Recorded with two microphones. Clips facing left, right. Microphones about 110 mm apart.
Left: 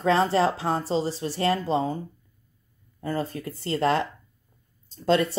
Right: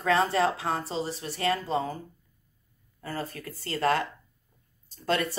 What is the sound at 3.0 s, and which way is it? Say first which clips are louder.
Speech: left 6 dB; 30° left (ahead or behind).